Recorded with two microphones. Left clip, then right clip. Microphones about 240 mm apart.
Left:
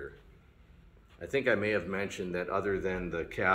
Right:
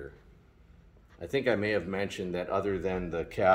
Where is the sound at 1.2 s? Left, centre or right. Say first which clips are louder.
Even; right.